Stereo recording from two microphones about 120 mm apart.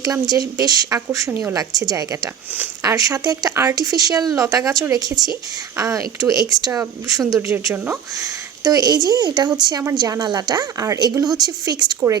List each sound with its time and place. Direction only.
0.0 s speech: 30° right (ahead or behind)
8.1 s speech: 30° right (ahead or behind)